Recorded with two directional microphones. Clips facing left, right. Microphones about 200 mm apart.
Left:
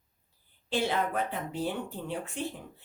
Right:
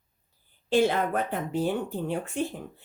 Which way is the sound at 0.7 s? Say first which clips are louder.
Right 6 dB; 45° right (ahead or behind).